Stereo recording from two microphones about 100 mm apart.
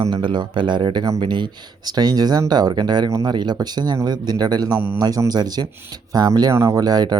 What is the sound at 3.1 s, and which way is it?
Speech, 30° right (ahead or behind).